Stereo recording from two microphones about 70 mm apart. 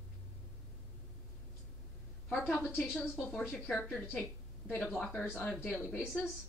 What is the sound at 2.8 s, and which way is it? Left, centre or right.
Speech, centre.